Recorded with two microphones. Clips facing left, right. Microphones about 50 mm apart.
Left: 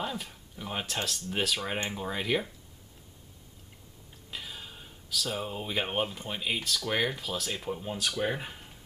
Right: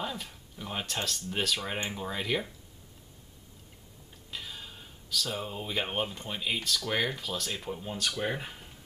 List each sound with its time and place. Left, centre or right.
0.0 s speech: centre
4.3 s speech: centre